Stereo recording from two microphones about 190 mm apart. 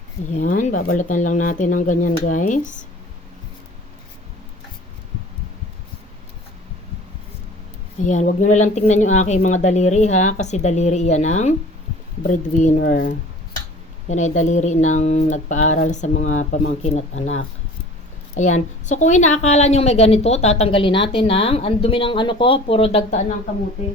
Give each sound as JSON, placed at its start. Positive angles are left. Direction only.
{"t": 0.3, "sound": "a woman's voice", "side_deg": 40}
{"t": 8.0, "sound": "a woman's voice", "side_deg": 40}
{"t": 18.3, "sound": "a woman's voice", "side_deg": 40}